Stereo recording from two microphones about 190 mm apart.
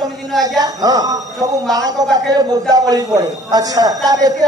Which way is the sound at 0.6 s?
20° right (ahead or behind).